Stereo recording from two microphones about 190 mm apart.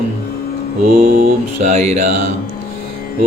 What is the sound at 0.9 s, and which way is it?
Mantra, 45° right (ahead or behind).